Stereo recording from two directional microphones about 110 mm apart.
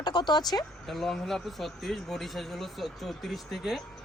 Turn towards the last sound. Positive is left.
turn(degrees=0)  # may be behind; listen again after turning